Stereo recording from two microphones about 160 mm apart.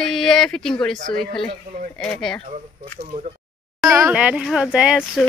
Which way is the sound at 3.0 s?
50° right (ahead or behind).